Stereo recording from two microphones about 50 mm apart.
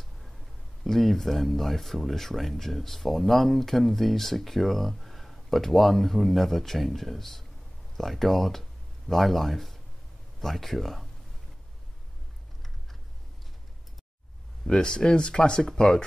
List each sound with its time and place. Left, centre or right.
0.8 s speech: centre
14.7 s speech: centre